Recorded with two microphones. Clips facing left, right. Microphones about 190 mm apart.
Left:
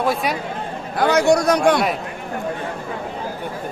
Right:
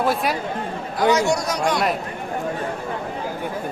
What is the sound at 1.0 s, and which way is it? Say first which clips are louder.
Speech: left 3 dB; 60° left (ahead or behind).